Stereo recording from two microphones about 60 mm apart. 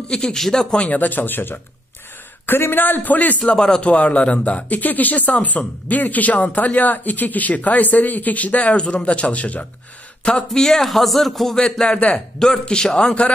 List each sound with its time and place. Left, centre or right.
0.1 s a man's voice: centre
0.8 s speech: left
10.2 s a man's voice: centre
11.9 s speech: left
12.4 s a man's voice: centre